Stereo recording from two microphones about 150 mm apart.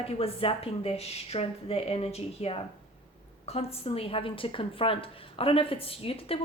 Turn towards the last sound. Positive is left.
turn(degrees=40)  # may be behind; listen again after turning